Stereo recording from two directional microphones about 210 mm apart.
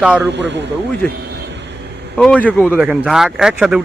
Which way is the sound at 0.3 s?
55° right (ahead or behind).